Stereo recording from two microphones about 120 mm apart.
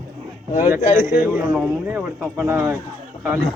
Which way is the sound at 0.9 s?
20° right (ahead or behind).